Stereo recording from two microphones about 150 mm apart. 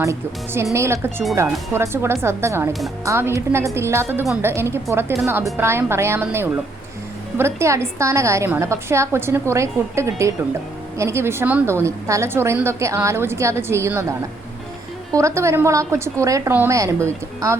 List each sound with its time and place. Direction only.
0.0 s a woman's voice: 20° right (ahead or behind)